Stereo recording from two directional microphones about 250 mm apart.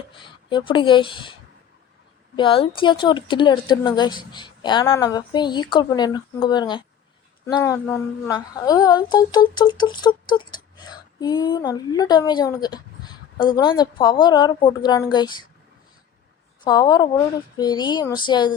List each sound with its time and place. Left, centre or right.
0.2 s a woman's voice: centre
16.6 s a woman's voice: centre